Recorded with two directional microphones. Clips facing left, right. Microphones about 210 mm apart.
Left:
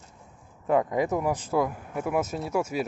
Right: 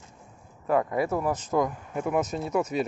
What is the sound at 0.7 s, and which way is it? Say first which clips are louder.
Speech: left 1 dB; 20° left (ahead or behind).